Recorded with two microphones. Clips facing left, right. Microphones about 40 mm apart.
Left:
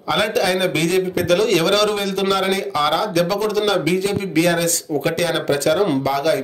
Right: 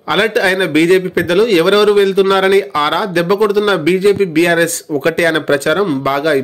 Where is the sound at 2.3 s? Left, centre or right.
Right.